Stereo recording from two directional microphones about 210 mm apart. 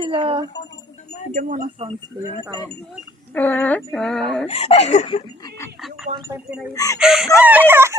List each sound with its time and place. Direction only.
0.0 s speech: 25° right (ahead or behind)
1.3 s speech: 40° right (ahead or behind)
3.3 s synthetic singing: 10° left (ahead or behind)
4.4 s speech: 30° left (ahead or behind)
6.1 s speech: 35° right (ahead or behind)
6.7 s speech: 15° left (ahead or behind)
7.0 s synthetic singing: centre (ahead or behind)
7.3 s speech: 5° right (ahead or behind)